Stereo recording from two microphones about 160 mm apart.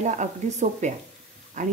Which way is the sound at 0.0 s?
50° right (ahead or behind).